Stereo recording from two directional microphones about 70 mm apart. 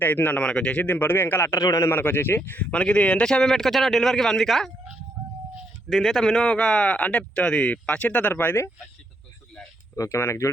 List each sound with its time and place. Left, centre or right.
0.0 s speech: left
1.5 s a man's voice: left
1.9 s speech: left; by 4.7 s centre
5.9 s speech: centre; by 8.6 s left
9.9 s speech: left